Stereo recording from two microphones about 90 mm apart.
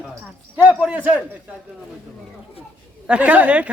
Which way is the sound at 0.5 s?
15° right (ahead or behind).